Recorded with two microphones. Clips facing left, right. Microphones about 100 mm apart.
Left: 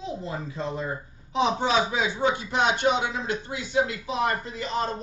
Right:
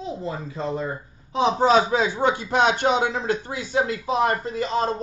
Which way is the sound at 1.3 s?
40° right (ahead or behind).